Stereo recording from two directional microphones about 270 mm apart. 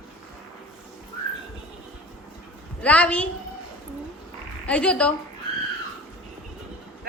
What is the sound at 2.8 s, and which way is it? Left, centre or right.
Speech, centre.